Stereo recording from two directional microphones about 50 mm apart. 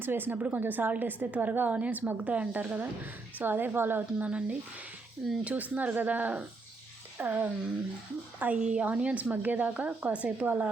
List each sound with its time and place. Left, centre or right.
0.0 s a woman's voice: right
4.3 s a woman's voice: right